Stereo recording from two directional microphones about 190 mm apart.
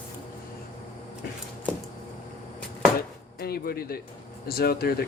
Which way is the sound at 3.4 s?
55° left (ahead or behind).